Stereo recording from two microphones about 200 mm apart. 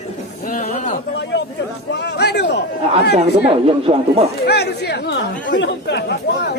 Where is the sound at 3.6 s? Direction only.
30° right (ahead or behind).